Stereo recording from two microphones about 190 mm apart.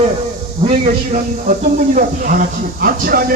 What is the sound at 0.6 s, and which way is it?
A man's voice, 30° right (ahead or behind).